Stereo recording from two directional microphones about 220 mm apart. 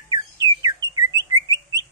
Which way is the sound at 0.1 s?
20° right (ahead or behind).